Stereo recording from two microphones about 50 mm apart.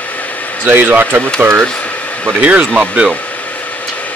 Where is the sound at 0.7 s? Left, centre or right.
Right.